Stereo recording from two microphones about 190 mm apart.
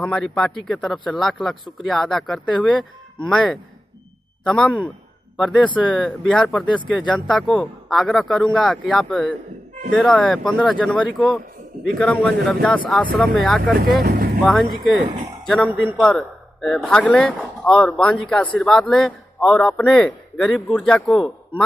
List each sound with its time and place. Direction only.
0.0 s a man's voice: 5° left (ahead or behind)
13.7 s speech: 50° right (ahead or behind)
15.4 s a man's voice: centre (ahead or behind)